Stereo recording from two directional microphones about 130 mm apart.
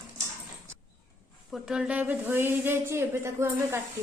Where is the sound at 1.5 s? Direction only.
5° right (ahead or behind); by 3.8 s 20° right (ahead or behind).